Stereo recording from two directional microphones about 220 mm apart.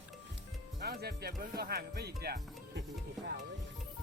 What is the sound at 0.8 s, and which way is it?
Speech, 45° right (ahead or behind).